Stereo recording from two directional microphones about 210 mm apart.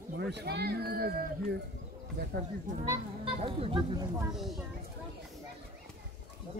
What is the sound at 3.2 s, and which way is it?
Speech, 25° right (ahead or behind).